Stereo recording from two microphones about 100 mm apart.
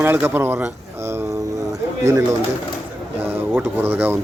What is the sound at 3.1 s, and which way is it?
Speech, 20° right (ahead or behind).